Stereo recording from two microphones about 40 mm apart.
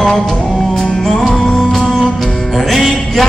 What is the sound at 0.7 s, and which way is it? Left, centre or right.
Music, centre.